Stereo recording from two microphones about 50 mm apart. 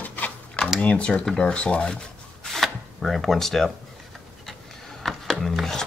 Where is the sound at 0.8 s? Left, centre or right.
Left.